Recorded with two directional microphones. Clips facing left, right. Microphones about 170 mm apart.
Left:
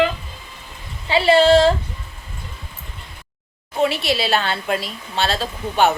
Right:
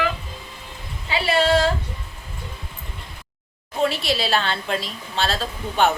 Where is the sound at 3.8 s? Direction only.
Centre (ahead or behind).